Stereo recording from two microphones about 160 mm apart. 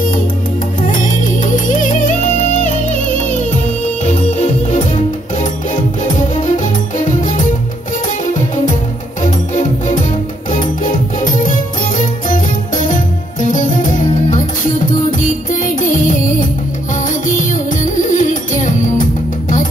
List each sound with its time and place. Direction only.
1.4 s music: 55° left (ahead or behind)
9.2 s music: 50° left (ahead or behind)
12.3 s music: 55° left (ahead or behind)
15.6 s music: 55° left (ahead or behind)
17.9 s music: 50° left (ahead or behind)